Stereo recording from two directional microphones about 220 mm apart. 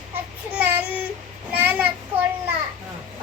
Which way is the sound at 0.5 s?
5° right (ahead or behind).